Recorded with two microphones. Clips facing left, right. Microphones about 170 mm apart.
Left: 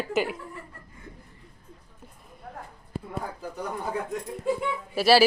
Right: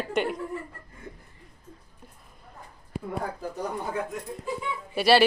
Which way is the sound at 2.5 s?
70° left (ahead or behind).